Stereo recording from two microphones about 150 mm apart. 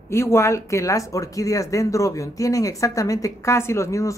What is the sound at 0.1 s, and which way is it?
Speech, 15° left (ahead or behind).